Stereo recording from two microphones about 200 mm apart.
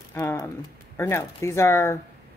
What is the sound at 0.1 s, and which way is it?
Speech, 10° left (ahead or behind).